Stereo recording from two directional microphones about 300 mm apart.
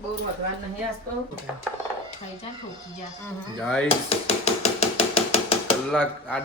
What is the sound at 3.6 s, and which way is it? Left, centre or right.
Speech, centre.